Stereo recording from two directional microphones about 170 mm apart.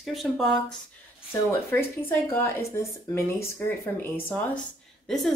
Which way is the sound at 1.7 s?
15° left (ahead or behind).